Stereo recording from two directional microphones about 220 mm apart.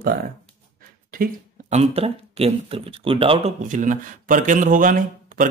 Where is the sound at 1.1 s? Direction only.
35° right (ahead or behind).